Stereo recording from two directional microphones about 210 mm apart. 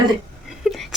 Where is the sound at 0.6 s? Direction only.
Centre (ahead or behind).